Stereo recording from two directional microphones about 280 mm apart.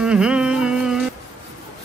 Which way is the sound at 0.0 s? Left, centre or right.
Centre.